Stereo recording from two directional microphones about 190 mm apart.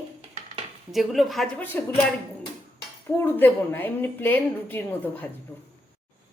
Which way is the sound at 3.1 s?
10° left (ahead or behind).